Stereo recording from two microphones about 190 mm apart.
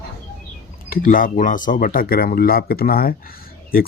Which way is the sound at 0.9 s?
45° left (ahead or behind).